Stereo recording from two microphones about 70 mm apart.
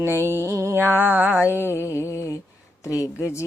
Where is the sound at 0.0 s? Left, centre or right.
Right.